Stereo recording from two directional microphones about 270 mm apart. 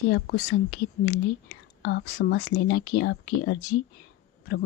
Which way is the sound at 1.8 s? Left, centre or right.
Left.